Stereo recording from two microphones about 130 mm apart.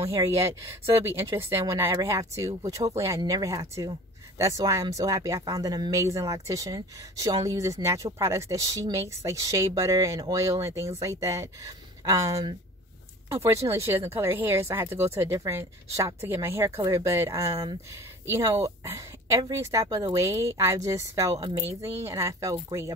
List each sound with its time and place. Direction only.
0.1 s speech: 25° right (ahead or behind)